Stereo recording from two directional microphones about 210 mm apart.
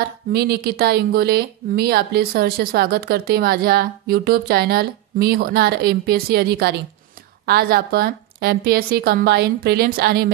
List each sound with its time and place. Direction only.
0.3 s speech: 50° right (ahead or behind)